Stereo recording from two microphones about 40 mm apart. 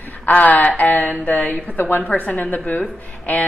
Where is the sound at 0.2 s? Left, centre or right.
Left.